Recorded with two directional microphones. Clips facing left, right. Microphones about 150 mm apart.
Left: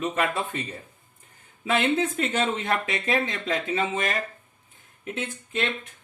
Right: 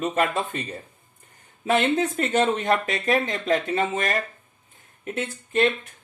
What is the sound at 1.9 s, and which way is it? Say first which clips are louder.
Speech: right 3 dB; 40° right (ahead or behind).